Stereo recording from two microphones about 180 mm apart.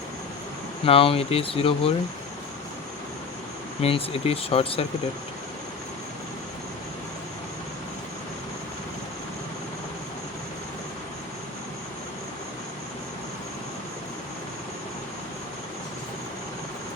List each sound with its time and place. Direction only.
0.9 s speech: 30° left (ahead or behind)
3.8 s speech: 35° left (ahead or behind)